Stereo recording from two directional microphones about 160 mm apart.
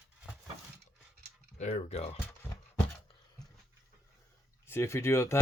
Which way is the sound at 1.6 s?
45° left (ahead or behind).